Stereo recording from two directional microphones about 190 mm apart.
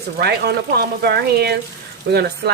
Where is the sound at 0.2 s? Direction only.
55° right (ahead or behind).